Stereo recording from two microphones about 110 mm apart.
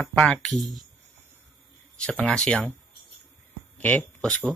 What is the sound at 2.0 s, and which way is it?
Speech, 10° left (ahead or behind).